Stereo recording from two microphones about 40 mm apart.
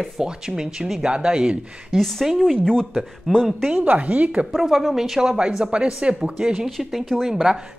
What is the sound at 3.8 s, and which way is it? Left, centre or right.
Speech, right.